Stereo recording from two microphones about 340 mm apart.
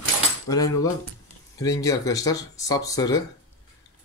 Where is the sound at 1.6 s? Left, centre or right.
Centre.